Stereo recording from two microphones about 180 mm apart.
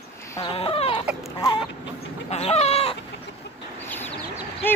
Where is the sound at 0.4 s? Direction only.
30° left (ahead or behind).